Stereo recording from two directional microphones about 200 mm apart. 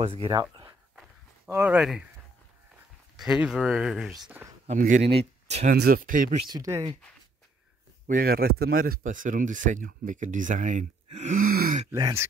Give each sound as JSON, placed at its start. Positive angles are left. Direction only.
{"t": 0.0, "sound": "speech", "side_deg": -25}
{"t": 0.9, "sound": "walk", "side_deg": -5}
{"t": 3.2, "sound": "speech", "side_deg": -5}
{"t": 4.6, "sound": "speech", "side_deg": -40}
{"t": 6.4, "sound": "speech", "side_deg": -20}
{"t": 8.1, "sound": "speech", "side_deg": -45}
{"t": 11.9, "sound": "speech", "side_deg": -15}